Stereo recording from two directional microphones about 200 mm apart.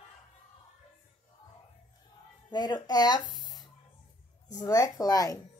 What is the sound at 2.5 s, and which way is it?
Speech, 20° left (ahead or behind).